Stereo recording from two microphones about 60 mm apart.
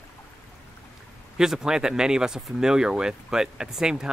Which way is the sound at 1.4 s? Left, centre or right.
Centre.